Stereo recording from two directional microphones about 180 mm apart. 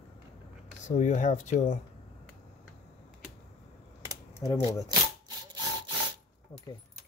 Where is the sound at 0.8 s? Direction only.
45° left (ahead or behind).